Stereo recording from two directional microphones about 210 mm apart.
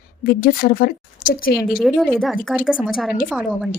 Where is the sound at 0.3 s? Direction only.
45° left (ahead or behind).